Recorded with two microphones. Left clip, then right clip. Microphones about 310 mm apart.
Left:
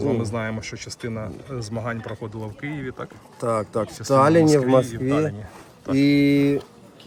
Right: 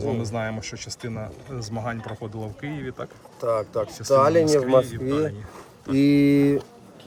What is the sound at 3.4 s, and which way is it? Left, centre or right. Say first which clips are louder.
Speech: even; left.